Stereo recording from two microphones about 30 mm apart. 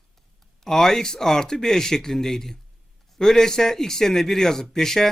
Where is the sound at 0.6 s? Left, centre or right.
Centre.